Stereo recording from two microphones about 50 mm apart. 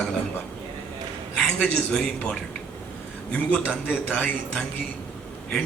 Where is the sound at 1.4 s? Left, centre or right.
Centre.